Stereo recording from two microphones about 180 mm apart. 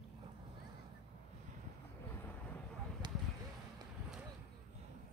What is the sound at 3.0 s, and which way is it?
Basketball bounce, 25° right (ahead or behind).